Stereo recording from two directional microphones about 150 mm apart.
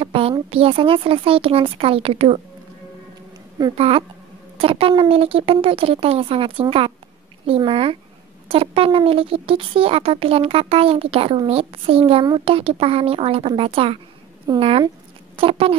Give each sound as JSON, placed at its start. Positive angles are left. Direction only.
{"t": 0.0, "sound": "speech", "side_deg": -40}
{"t": 3.7, "sound": "speech", "side_deg": -40}